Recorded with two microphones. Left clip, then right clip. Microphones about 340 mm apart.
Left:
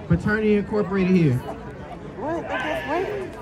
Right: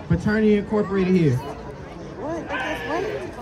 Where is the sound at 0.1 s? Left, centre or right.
Centre.